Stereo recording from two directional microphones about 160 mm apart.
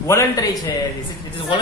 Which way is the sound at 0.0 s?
20° left (ahead or behind).